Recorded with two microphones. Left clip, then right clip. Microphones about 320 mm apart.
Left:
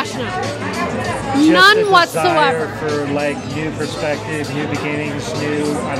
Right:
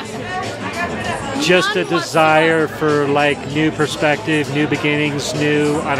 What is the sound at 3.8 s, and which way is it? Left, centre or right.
Speech, right.